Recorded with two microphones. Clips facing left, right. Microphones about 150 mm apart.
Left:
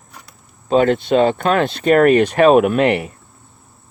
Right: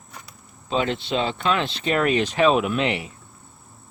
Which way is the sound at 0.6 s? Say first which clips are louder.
Left 10 dB; 50° left (ahead or behind).